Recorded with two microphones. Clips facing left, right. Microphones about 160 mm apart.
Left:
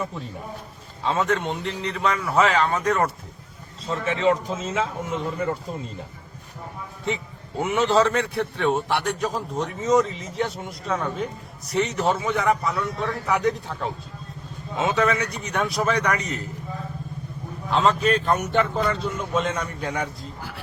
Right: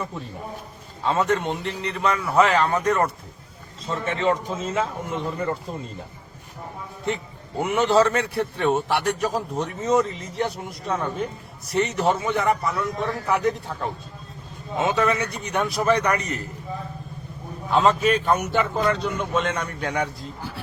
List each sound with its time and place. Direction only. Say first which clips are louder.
1.0 s a man's voice: right 1 dB; centre (ahead or behind)
7.6 s a man's voice: right 1 dB; centre (ahead or behind)
17.7 s a man's voice: right 1 dB; 5° right (ahead or behind)